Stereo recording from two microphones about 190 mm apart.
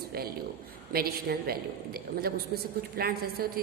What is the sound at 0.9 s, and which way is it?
Speech, 55° right (ahead or behind).